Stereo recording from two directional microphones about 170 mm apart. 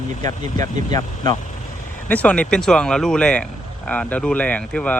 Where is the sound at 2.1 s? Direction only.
10° left (ahead or behind).